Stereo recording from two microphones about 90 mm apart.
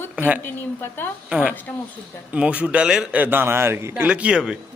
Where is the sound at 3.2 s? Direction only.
20° right (ahead or behind).